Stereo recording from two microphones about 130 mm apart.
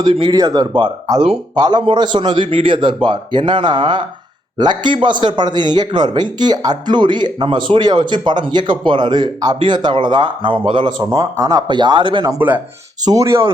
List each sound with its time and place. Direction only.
0.0 s a man's voice: 35° right (ahead or behind)
11.3 s a man's voice: 30° right (ahead or behind)
13.1 s speech: 25° right (ahead or behind)